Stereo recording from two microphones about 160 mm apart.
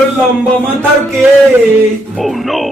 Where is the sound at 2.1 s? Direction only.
Centre (ahead or behind).